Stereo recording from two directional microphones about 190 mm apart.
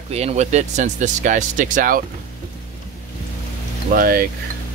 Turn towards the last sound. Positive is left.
turn(degrees=-50)  # may be behind; listen again after turning